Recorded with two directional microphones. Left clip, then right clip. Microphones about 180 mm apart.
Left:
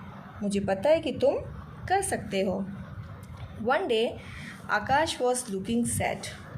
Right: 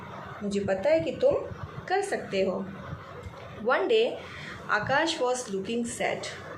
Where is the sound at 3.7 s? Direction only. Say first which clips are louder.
Right 2 dB; 50° left (ahead or behind).